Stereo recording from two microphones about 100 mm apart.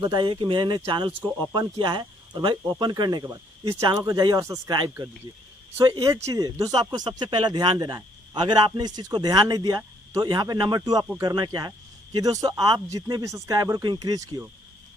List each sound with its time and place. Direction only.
0.0 s speech: 50° right (ahead or behind)
5.9 s speech: 35° right (ahead or behind)